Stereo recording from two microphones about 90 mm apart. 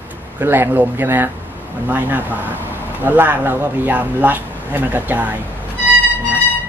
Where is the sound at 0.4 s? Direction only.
20° right (ahead or behind).